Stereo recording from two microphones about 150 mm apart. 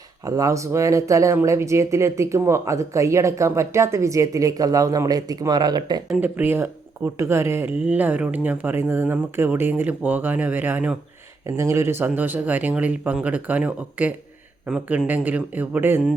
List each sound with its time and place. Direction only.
0.3 s speech: 20° right (ahead or behind)
6.1 s speech: 10° right (ahead or behind)